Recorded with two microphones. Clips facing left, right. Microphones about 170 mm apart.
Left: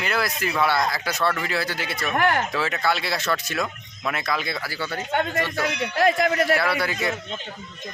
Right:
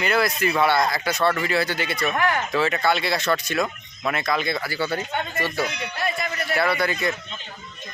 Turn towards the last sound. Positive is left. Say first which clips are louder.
# right 1 dB
turn(degrees=5)  # may be behind; listen again after turning